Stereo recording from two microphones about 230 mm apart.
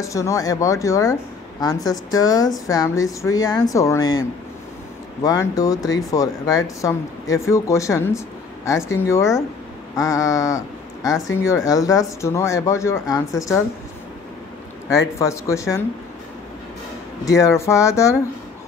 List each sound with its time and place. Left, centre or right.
0.0 s speech: centre
14.9 s speech: centre
17.2 s speech: centre